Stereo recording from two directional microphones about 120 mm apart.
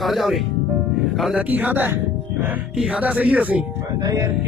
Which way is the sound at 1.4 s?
15° right (ahead or behind).